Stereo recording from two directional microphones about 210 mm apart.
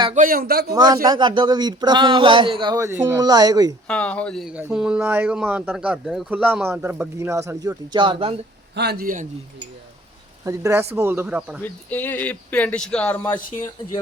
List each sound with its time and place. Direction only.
0.0 s speech: 35° right (ahead or behind)
0.7 s speech: 20° right (ahead or behind)
3.8 s speech: 5° left (ahead or behind); by 8.4 s 25° right (ahead or behind)
8.7 s speech: 50° right (ahead or behind)
10.4 s speech: 15° right (ahead or behind)
11.6 s speech: 10° left (ahead or behind)
13.2 s speech: 15° left (ahead or behind)